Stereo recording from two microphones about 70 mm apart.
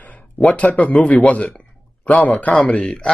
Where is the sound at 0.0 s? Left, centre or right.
Left.